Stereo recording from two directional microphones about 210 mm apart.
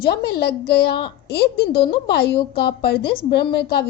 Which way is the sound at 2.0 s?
50° left (ahead or behind).